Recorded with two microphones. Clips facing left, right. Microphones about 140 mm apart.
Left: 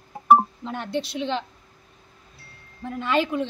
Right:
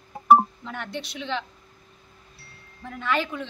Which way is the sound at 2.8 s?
25° left (ahead or behind).